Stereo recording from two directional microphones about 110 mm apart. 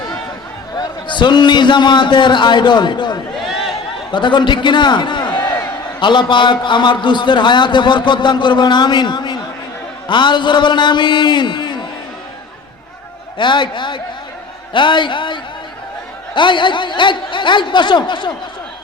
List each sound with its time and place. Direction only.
0.8 s a man's voice: 45° left (ahead or behind)
3.4 s a sound: centre (ahead or behind)
4.1 s a man's voice: 45° left (ahead or behind)
13.4 s a man's voice: 45° left (ahead or behind)